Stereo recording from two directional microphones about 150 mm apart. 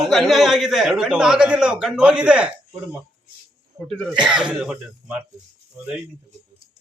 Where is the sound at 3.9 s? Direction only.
5° right (ahead or behind).